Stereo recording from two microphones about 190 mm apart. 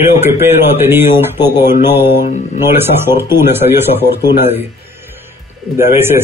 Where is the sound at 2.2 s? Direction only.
40° left (ahead or behind).